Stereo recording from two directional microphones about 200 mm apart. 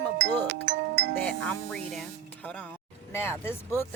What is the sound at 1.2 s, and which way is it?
Speech, 5° left (ahead or behind).